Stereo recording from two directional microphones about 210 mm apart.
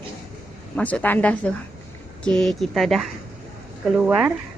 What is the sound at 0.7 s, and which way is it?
Speech, 5° left (ahead or behind).